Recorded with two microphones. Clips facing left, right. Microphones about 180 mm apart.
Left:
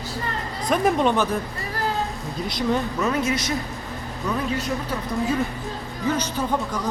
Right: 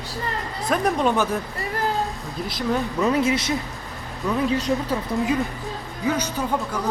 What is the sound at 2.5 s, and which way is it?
Speech, centre (ahead or behind).